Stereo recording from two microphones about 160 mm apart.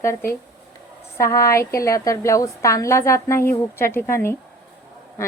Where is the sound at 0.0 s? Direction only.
15° left (ahead or behind).